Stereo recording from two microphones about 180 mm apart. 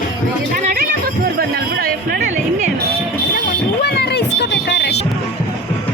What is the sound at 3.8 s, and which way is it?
Music, 65° left (ahead or behind).